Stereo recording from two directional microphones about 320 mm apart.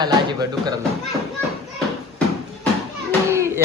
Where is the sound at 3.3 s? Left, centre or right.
Centre.